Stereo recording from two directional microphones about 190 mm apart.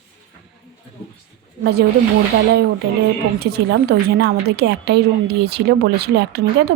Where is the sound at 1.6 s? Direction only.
55° right (ahead or behind).